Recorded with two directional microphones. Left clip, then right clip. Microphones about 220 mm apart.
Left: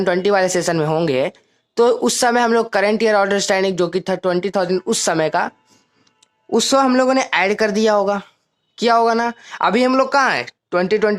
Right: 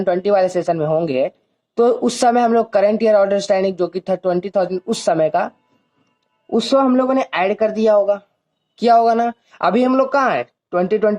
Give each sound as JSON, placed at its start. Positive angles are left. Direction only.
{"t": 0.0, "sound": "speech", "side_deg": 25}